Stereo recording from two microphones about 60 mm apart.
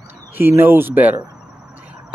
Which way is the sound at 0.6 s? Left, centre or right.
Right.